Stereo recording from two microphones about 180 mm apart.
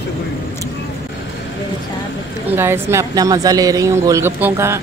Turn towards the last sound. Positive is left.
turn(degrees=-15)  # may be behind; listen again after turning